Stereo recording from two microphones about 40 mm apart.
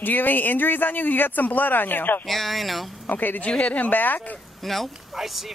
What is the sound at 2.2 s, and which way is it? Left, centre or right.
Speech, centre.